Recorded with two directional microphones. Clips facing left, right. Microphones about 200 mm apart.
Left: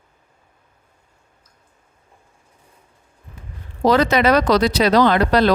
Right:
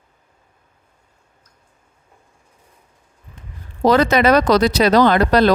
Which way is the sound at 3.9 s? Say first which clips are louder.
Right 2 dB; 50° right (ahead or behind).